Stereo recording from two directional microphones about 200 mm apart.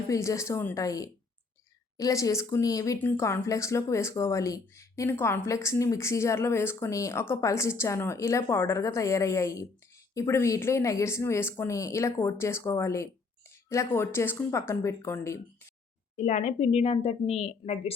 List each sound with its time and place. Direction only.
0.1 s speech: 15° left (ahead or behind)
16.1 s a woman's voice: 35° left (ahead or behind)